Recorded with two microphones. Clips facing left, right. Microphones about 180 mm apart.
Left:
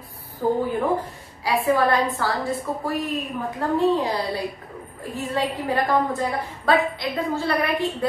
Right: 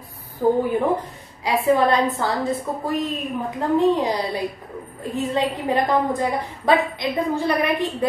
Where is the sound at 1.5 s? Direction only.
20° right (ahead or behind).